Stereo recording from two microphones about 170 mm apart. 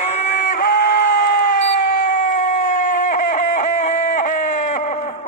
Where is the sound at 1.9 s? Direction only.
55° left (ahead or behind).